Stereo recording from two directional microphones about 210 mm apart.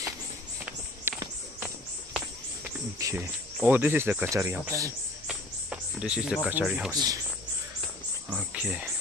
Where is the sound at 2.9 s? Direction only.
15° right (ahead or behind).